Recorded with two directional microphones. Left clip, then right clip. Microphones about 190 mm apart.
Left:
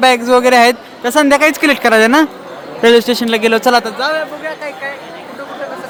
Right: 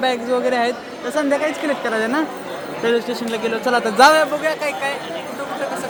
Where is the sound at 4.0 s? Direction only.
50° right (ahead or behind).